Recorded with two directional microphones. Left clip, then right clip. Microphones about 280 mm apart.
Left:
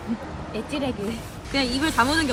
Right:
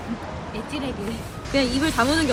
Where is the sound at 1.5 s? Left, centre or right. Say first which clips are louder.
Right 2 dB; centre.